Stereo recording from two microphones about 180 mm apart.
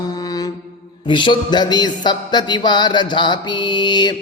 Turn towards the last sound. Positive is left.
turn(degrees=25)  # may be behind; listen again after turning